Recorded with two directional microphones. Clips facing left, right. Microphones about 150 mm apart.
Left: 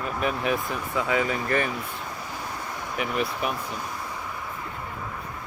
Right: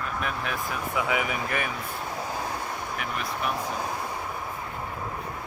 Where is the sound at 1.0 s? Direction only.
15° right (ahead or behind).